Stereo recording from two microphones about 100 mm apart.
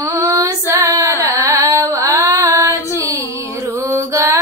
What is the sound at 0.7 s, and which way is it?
Carnatic music, 30° right (ahead or behind).